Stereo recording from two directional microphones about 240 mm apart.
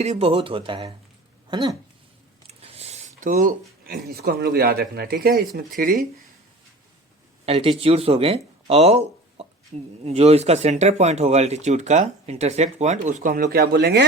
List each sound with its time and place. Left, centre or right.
0.0 s speech: right
7.4 s speech: right